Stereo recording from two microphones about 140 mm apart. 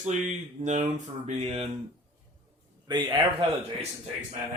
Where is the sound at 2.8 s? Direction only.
35° right (ahead or behind).